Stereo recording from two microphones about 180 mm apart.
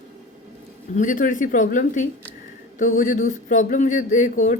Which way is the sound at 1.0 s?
45° left (ahead or behind).